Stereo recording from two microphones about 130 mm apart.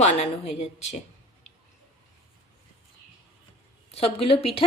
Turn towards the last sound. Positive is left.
turn(degrees=45)  # may be behind; listen again after turning